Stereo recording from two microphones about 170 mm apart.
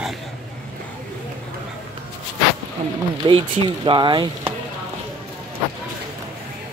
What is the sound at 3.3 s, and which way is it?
Speech, 30° right (ahead or behind).